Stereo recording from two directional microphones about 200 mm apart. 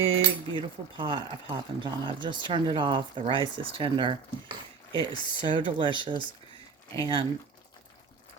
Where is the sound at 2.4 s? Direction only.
25° right (ahead or behind).